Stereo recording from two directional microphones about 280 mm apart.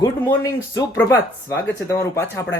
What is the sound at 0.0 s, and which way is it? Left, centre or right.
Speech, centre.